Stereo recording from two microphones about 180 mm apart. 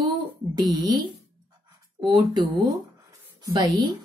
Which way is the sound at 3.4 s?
20° right (ahead or behind).